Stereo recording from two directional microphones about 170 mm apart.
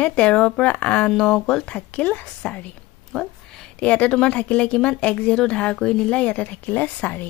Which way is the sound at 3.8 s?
10° left (ahead or behind).